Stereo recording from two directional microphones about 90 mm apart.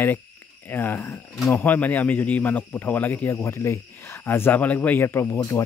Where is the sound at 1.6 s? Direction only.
20° left (ahead or behind).